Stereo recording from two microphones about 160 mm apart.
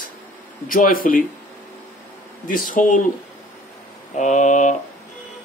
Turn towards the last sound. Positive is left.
turn(degrees=50)  # may be behind; listen again after turning